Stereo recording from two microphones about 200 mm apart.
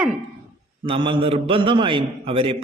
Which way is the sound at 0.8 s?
25° right (ahead or behind).